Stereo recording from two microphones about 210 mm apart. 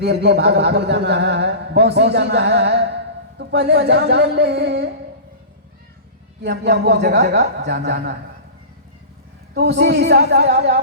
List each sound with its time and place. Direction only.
0.0 s a man's voice: 50° right (ahead or behind)
6.4 s a man's voice: 55° right (ahead or behind)
9.6 s a man's voice: 50° right (ahead or behind)